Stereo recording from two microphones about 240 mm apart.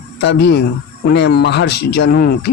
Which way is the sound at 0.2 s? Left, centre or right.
Left.